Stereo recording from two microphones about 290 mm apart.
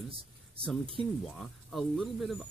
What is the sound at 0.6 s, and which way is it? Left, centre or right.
Speech, centre.